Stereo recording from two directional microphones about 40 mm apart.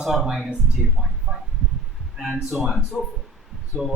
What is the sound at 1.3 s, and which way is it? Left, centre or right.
Speech, centre.